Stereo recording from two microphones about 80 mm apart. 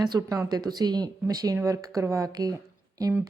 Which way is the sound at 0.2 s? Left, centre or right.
Right.